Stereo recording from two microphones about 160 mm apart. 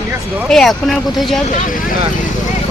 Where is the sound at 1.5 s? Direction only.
55° left (ahead or behind).